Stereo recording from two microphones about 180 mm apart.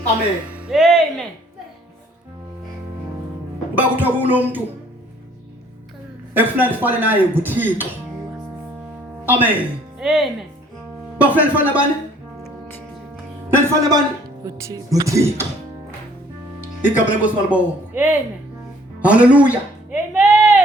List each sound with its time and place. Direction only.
0.4 s speech: 5° right (ahead or behind)
3.8 s speech: 10° right (ahead or behind)
6.3 s speech: 10° right (ahead or behind)
9.2 s speech: 10° right (ahead or behind)
13.6 s speech: 15° right (ahead or behind)
16.8 s speech: 10° right (ahead or behind)
18.9 s a sound: 5° right (ahead or behind)